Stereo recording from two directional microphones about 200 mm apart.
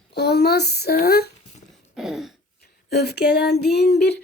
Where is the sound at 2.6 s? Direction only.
50° left (ahead or behind).